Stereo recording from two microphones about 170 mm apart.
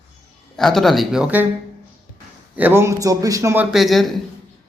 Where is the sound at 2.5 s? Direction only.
10° right (ahead or behind).